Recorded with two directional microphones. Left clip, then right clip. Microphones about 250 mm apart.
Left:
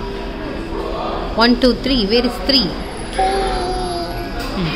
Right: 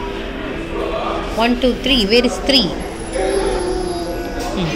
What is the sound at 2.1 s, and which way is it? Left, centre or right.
Speech, centre.